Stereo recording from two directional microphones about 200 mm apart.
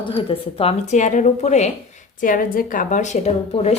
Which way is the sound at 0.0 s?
25° left (ahead or behind).